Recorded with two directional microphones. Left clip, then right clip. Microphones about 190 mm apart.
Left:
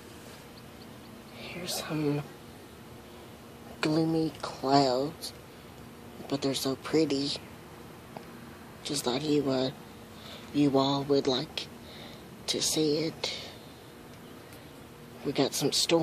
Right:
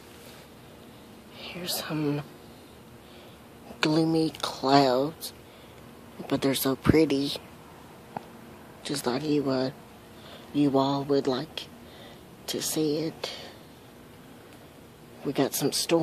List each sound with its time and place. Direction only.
1.4 s speech: 15° right (ahead or behind)
3.8 s speech: 20° right (ahead or behind)
8.8 s speech: 20° right (ahead or behind)
12.4 s speech: 15° right (ahead or behind)
15.2 s speech: 20° right (ahead or behind)